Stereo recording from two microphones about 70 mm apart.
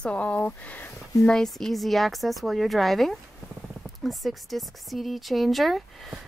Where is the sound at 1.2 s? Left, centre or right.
Centre.